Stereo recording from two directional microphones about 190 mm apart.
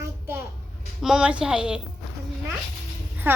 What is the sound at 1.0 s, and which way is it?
Speech, 5° right (ahead or behind).